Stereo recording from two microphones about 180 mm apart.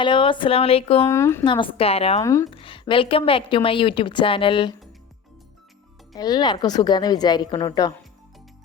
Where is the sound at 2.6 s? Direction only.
30° left (ahead or behind).